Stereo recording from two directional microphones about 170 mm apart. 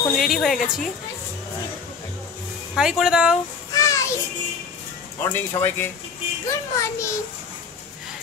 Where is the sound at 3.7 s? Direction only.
20° left (ahead or behind).